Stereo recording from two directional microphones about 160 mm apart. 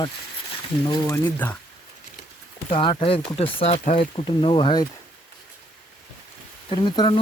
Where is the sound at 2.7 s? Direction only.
35° left (ahead or behind).